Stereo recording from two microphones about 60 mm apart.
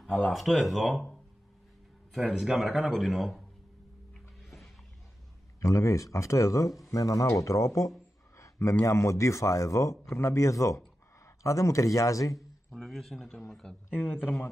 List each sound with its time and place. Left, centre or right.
0.3 s speech: centre
2.1 s speech: centre
5.6 s speech: left
12.4 s speech: centre
13.8 s a man's voice: left